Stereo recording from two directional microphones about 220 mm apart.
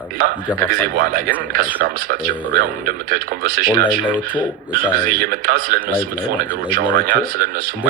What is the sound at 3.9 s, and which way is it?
Speech, 5° right (ahead or behind).